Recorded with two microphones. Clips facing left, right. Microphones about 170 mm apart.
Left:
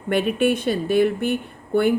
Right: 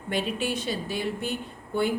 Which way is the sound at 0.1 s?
60° left (ahead or behind).